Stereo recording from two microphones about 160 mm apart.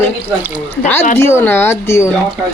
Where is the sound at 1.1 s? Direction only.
15° left (ahead or behind).